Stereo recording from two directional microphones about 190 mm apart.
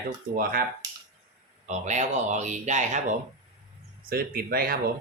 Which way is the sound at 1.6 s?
40° right (ahead or behind).